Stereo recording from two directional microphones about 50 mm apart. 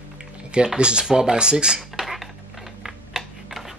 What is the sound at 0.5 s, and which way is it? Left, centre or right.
Speech, centre.